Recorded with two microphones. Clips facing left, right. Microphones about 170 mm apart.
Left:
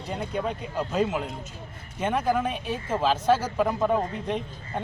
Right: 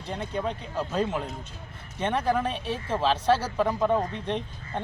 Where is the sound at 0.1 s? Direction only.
10° left (ahead or behind).